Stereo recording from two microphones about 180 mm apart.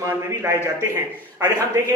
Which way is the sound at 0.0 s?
15° right (ahead or behind).